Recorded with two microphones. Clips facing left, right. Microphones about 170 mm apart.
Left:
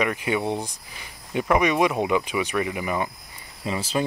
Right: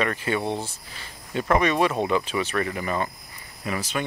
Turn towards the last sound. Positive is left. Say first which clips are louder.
# left 3 dB
turn(degrees=30)  # may be behind; listen again after turning